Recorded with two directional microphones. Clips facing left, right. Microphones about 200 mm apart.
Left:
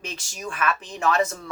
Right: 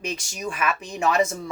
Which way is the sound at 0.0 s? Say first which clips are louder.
Right 4 dB; 10° right (ahead or behind).